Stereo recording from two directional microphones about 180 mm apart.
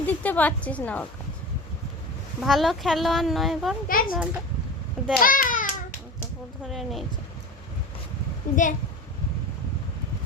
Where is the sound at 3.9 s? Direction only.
55° left (ahead or behind).